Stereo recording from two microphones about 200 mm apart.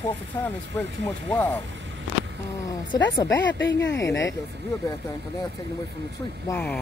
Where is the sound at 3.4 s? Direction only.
65° left (ahead or behind).